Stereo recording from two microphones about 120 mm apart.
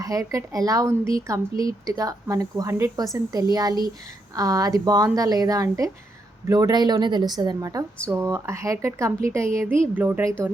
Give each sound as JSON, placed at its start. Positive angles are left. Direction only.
{"t": 0.0, "sound": "speech", "side_deg": -30}